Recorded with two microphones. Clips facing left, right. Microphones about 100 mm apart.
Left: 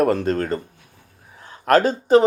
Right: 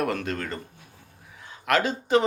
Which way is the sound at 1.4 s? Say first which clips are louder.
Left 8 dB; 40° left (ahead or behind).